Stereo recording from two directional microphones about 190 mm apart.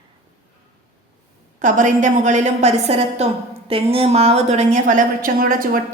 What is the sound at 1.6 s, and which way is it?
A woman's voice, 40° right (ahead or behind).